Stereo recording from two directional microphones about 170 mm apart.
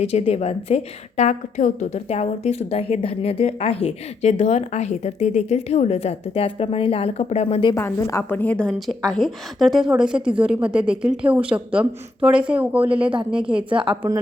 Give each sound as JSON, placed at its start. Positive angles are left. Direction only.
{"t": 0.0, "sound": "a woman's voice", "side_deg": 40}
{"t": 7.8, "sound": "a woman's voice", "side_deg": 15}
{"t": 13.7, "sound": "a woman's voice", "side_deg": -30}